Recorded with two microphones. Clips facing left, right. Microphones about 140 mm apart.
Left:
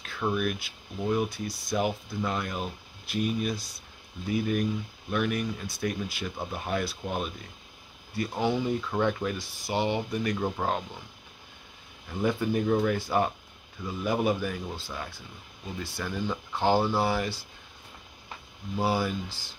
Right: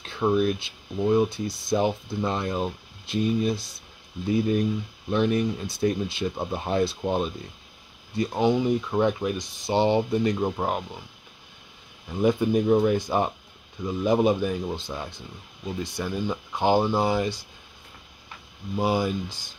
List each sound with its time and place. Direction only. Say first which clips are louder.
0.0 s speech: right 6 dB; 25° right (ahead or behind)
10.4 s speech: right 3 dB; 15° right (ahead or behind)
12.2 s speech: right 5 dB; 20° right (ahead or behind)
18.8 s speech: right 3 dB; 20° right (ahead or behind)